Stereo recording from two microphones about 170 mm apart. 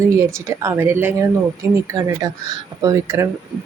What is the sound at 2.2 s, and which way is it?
Speech, 20° right (ahead or behind).